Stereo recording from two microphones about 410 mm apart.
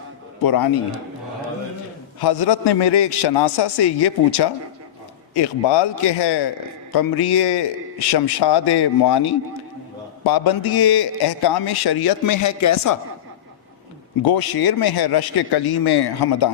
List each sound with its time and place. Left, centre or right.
0.4 s a man's voice: left
2.2 s speech: left
5.3 s speech: left
6.9 s a man's voice: left
14.2 s a man's voice: left